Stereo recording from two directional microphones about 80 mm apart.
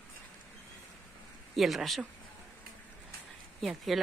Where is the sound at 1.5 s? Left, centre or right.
Centre.